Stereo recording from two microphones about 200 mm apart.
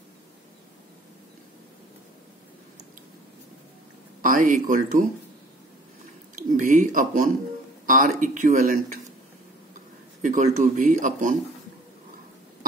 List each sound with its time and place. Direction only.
4.2 s speech: 40° right (ahead or behind)
6.3 s a sound: 40° right (ahead or behind)
7.8 s speech: 40° right (ahead or behind)
10.2 s speech: 40° right (ahead or behind)